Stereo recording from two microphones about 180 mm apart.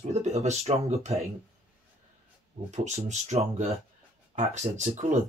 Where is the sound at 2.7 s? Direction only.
40° right (ahead or behind).